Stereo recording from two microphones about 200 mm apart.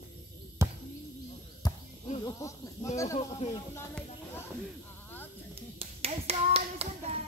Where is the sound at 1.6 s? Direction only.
20° left (ahead or behind).